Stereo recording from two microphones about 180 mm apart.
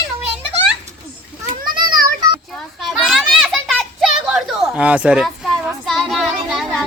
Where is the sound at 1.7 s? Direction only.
25° right (ahead or behind).